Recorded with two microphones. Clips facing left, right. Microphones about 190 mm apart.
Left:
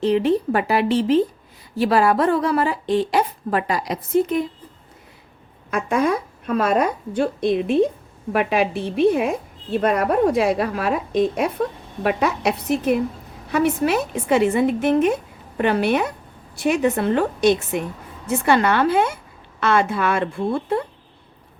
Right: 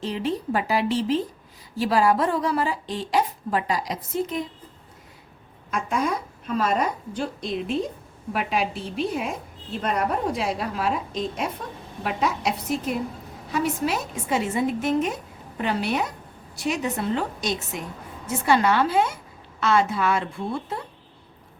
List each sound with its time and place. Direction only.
0.0 s a woman's voice: 60° left (ahead or behind)
5.7 s a woman's voice: 60° left (ahead or behind)